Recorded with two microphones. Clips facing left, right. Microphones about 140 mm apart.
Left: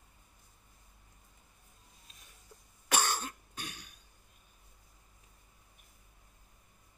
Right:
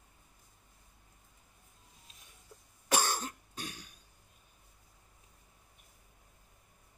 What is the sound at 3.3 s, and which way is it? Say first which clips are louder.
Cough: right 1 dB; 35° right (ahead or behind).